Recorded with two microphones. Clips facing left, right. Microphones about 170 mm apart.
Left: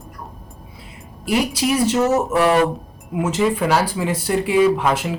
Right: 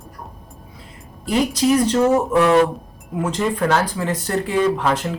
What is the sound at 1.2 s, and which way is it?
Speech, 10° left (ahead or behind).